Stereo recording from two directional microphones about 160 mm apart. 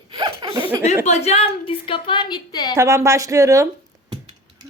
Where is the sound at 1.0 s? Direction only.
40° left (ahead or behind); by 2.7 s 25° left (ahead or behind).